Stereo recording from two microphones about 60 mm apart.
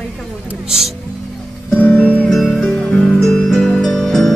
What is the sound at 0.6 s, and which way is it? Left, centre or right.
Speech, centre.